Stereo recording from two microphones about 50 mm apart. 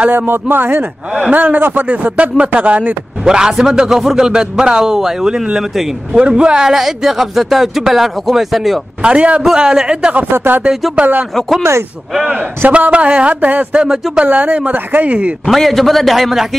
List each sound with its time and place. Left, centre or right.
0.3 s speech: right
1.1 s a man's voice: right
3.3 s a man's voice: centre
9.0 s a man's voice: right
9.4 s a man's voice: centre
10.3 s speech: right
11.0 s a man's voice: right
11.3 s speech: centre
12.4 s a man's voice: right
15.4 s speech: centre